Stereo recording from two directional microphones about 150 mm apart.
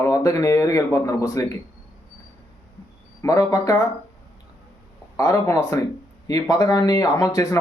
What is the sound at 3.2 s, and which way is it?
Speech, 25° left (ahead or behind).